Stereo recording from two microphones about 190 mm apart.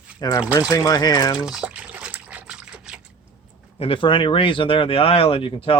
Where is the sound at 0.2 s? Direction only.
20° left (ahead or behind).